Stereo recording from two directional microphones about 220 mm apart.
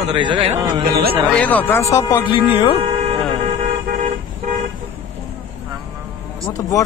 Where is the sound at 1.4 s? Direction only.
5° left (ahead or behind); by 2.8 s 20° left (ahead or behind).